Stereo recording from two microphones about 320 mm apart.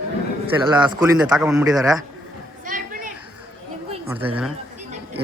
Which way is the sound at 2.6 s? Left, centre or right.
Right.